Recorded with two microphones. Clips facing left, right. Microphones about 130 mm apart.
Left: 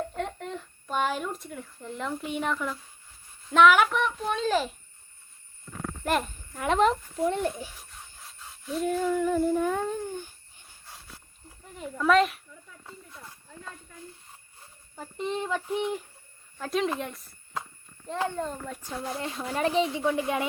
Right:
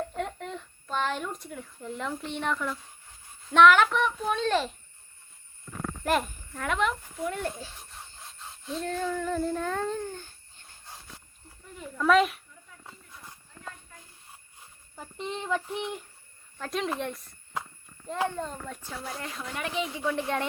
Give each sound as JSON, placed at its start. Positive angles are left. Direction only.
{"t": 0.1, "sound": "child singing", "side_deg": 0}
{"t": 0.9, "sound": "speech", "side_deg": 10}
{"t": 6.1, "sound": "a child's voice", "side_deg": 0}
{"t": 6.7, "sound": "speech", "side_deg": 35}
{"t": 7.3, "sound": "speech", "side_deg": 20}
{"t": 8.7, "sound": "speech", "side_deg": 10}
{"t": 11.9, "sound": "speech", "side_deg": 0}
{"t": 14.9, "sound": "speech", "side_deg": 0}
{"t": 19.2, "sound": "speech", "side_deg": 30}
{"t": 20.1, "sound": "speech", "side_deg": 10}